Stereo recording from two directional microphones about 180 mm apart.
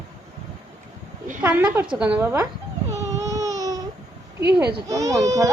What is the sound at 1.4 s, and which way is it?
A woman's voice, 10° right (ahead or behind).